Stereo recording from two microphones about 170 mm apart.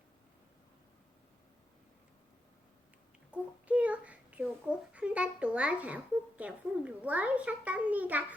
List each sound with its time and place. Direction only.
3.3 s child singing: 10° right (ahead or behind)
4.9 s speech: 5° right (ahead or behind)